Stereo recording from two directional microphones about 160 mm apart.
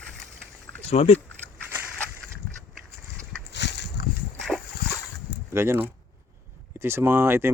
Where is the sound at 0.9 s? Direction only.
40° left (ahead or behind).